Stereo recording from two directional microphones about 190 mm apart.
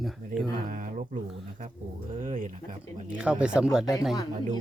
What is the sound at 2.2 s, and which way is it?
Speech, 40° right (ahead or behind).